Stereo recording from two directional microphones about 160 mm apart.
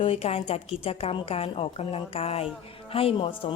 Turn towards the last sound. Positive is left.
turn(degrees=35)  # may be behind; listen again after turning